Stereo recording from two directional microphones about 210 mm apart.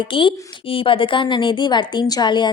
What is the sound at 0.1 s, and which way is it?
A woman's voice, 25° left (ahead or behind).